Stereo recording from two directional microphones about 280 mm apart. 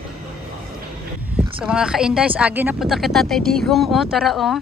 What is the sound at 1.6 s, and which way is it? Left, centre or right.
Speech, centre.